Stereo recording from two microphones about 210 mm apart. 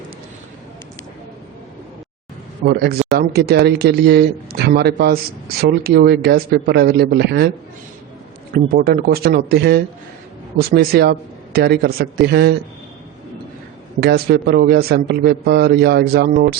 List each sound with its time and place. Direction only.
2.6 s a man's voice: 50° right (ahead or behind)
8.5 s a man's voice: 45° right (ahead or behind)
14.0 s a man's voice: 50° right (ahead or behind)